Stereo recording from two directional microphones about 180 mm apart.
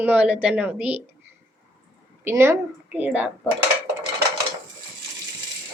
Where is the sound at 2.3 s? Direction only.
15° right (ahead or behind).